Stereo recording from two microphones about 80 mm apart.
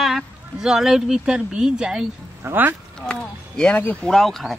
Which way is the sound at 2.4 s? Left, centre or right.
Right.